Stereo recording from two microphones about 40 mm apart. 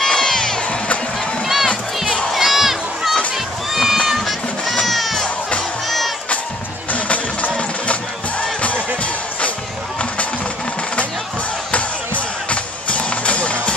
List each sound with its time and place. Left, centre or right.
0.0 s crowd: centre
0.6 s crowd: left
1.4 s a sound: centre
3.3 s run: centre
4.1 s music: centre
4.8 s a sound: centre
5.9 s crowd: centre
6.9 s music: left
7.5 s music: left
12.4 s music: left